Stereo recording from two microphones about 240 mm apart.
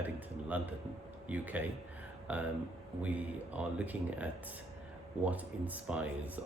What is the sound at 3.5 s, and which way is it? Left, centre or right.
Speech, centre.